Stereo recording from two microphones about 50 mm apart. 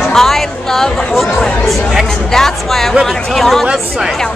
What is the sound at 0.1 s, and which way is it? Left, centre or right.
Speech, centre.